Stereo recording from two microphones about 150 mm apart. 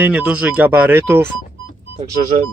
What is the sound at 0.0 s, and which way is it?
Speech, 10° right (ahead or behind).